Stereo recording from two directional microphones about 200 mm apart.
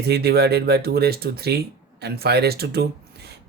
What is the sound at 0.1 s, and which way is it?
Speech, 55° right (ahead or behind).